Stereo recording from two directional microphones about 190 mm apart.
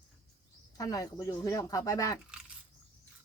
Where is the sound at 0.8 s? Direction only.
20° left (ahead or behind).